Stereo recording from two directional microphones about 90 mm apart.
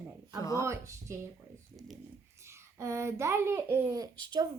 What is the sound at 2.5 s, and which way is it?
A child's voice, 30° right (ahead or behind).